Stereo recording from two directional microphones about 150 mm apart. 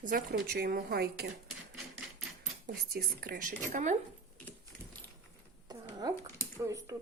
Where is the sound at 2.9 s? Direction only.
85° right; by 3.9 s 60° right (ahead or behind).